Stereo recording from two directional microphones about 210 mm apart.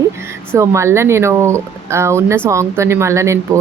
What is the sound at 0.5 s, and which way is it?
Speech, 15° right (ahead or behind).